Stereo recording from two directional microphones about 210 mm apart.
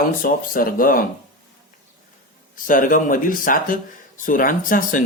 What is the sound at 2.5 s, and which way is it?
Speech, 40° left (ahead or behind).